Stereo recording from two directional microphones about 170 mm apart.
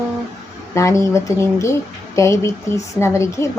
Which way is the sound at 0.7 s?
15° left (ahead or behind).